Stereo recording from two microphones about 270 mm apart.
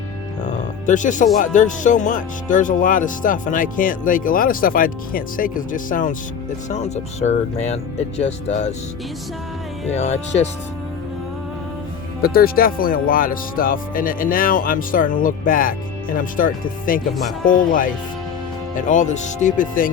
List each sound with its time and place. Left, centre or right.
0.4 s music: left
1.4 s speech: left
9.9 s speech: left
12.2 s speech: left